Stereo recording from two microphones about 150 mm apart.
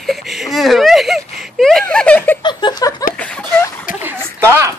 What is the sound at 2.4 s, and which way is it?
Laughter, 30° left (ahead or behind).